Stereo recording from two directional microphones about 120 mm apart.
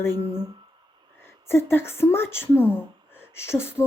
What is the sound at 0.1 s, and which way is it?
Speech, 30° right (ahead or behind).